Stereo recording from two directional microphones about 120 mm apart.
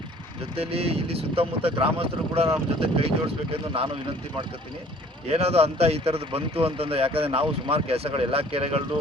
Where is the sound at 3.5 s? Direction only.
55° right (ahead or behind).